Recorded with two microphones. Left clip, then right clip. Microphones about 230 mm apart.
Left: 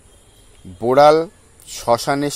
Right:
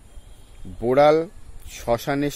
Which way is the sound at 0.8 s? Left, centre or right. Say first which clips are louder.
Left 5 dB; left.